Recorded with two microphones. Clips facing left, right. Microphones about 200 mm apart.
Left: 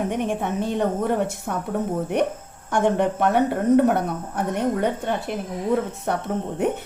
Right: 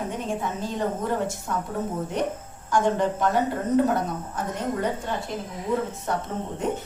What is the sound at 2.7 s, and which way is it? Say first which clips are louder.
A woman's voice: left 2 dB; 60° left (ahead or behind).